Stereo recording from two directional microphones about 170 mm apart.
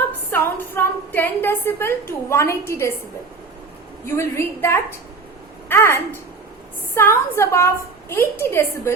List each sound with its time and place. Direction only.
0.3 s a woman's voice: 10° left (ahead or behind)
4.0 s a woman's voice: 15° left (ahead or behind)